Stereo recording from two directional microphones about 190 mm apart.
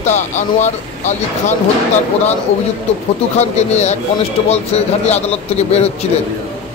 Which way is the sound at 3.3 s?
35° left (ahead or behind).